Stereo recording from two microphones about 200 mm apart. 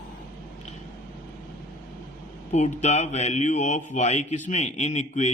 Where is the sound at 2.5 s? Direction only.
35° left (ahead or behind).